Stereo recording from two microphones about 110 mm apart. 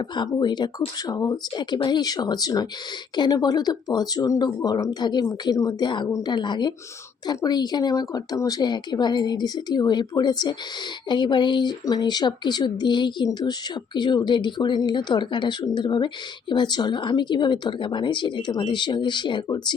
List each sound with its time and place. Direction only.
0.0 s speech: 40° left (ahead or behind)
6.3 s speech: 45° left (ahead or behind)